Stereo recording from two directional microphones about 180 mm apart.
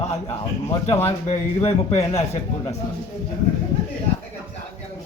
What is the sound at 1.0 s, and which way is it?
A man's voice, 35° left (ahead or behind).